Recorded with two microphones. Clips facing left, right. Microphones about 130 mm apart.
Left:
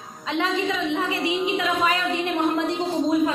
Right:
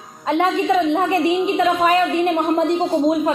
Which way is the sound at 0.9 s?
50° right (ahead or behind).